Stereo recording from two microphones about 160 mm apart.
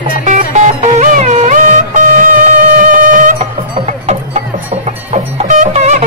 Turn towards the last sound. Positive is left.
turn(degrees=-50)  # may be behind; listen again after turning